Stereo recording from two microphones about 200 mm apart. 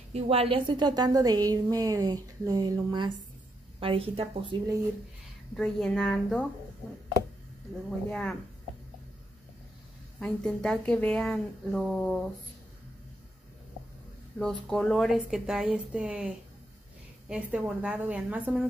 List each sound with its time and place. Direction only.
0.1 s a woman's voice: 30° right (ahead or behind)
5.6 s a woman's voice: 5° left (ahead or behind)
8.1 s a woman's voice: 5° left (ahead or behind)
10.1 s a woman's voice: 5° left (ahead or behind)
14.4 s a woman's voice: 5° left (ahead or behind)